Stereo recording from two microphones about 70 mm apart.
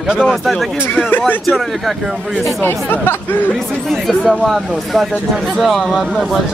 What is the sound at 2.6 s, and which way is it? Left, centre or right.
Speech, left.